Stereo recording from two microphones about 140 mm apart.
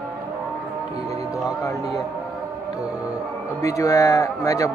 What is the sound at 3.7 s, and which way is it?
Speech, 20° left (ahead or behind).